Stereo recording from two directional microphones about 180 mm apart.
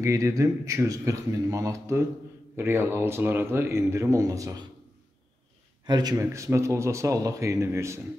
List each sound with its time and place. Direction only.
0.0 s speech: 15° right (ahead or behind)
5.9 s speech: 20° right (ahead or behind)